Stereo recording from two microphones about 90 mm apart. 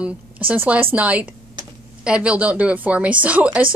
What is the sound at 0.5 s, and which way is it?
Speech, 20° right (ahead or behind).